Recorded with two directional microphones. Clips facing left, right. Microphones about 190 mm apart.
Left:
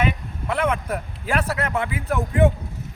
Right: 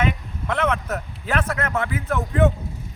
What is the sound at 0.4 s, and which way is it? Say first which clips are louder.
Speech: even; 10° left (ahead or behind).